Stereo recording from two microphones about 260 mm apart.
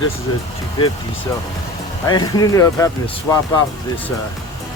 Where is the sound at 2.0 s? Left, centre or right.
Centre.